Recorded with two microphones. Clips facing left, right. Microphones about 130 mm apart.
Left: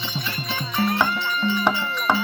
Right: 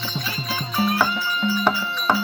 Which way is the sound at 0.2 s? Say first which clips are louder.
Even; 5° right (ahead or behind).